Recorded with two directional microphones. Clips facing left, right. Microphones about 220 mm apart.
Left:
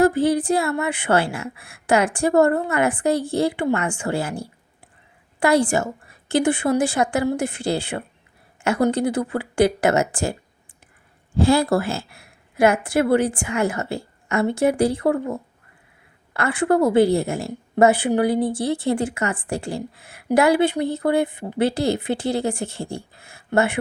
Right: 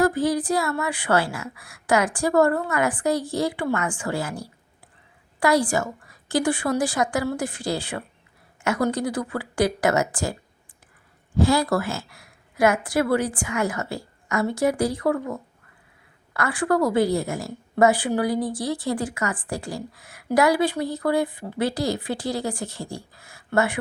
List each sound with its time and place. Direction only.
0.0 s a woman's voice: 25° left (ahead or behind)
11.3 s a woman's voice: 30° left (ahead or behind)